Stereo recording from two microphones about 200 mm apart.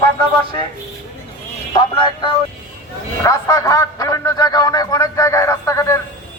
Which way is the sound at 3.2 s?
15° left (ahead or behind).